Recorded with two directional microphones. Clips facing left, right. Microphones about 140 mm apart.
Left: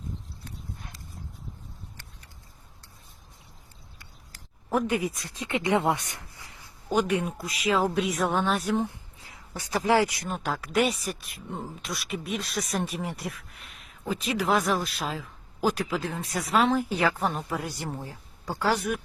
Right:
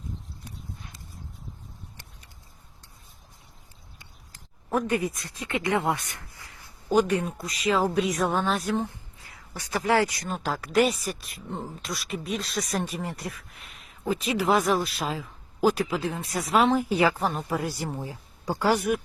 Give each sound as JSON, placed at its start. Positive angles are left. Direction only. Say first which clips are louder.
{"t": 4.9, "sound": "speech", "louder": "right 1 dB", "side_deg": 15}
{"t": 6.9, "sound": "speech", "louder": "right 3 dB", "side_deg": 0}
{"t": 9.3, "sound": "speech", "louder": "left 1 dB", "side_deg": 20}
{"t": 10.2, "sound": "speech", "louder": "right 1 dB", "side_deg": 0}
{"t": 18.0, "sound": "speech", "louder": "right 4 dB", "side_deg": -15}